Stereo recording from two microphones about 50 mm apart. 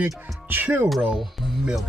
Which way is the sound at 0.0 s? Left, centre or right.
Right.